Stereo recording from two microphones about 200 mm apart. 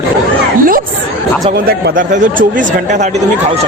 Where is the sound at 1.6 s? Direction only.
45° right (ahead or behind).